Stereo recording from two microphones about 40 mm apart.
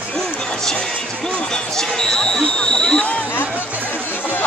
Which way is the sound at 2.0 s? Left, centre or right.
Centre.